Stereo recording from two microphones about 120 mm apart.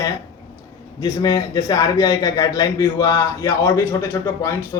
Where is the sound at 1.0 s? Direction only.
35° left (ahead or behind).